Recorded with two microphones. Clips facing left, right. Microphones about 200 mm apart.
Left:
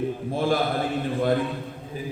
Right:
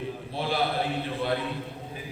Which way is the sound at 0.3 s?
45° left (ahead or behind).